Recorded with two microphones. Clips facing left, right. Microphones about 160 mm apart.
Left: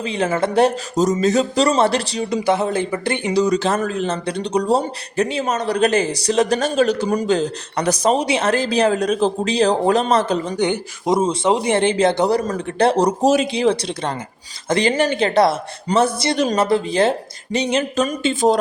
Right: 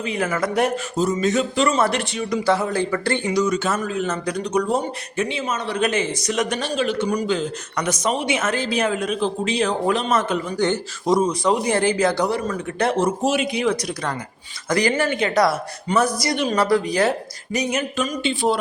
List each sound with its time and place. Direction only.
0.0 s speech: 30° left (ahead or behind)
0.9 s speech: 40° left (ahead or behind)
2.5 s speech: 20° left (ahead or behind)
3.4 s speech: 35° left (ahead or behind)
6.6 s speech: 45° left (ahead or behind)
10.6 s speech: 20° left (ahead or behind)
12.3 s speech: 40° left (ahead or behind)
18.0 s speech: 45° left (ahead or behind)